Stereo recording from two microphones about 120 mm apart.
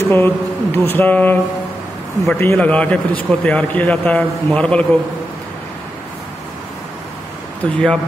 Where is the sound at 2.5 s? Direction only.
10° left (ahead or behind).